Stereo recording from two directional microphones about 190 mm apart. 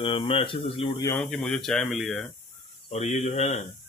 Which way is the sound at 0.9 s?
15° left (ahead or behind).